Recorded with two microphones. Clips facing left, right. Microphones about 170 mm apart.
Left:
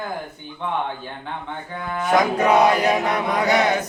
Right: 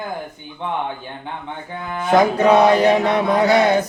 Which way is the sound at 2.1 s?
25° right (ahead or behind).